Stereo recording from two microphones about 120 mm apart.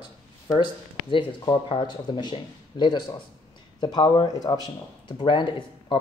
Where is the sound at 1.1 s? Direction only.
45° left (ahead or behind).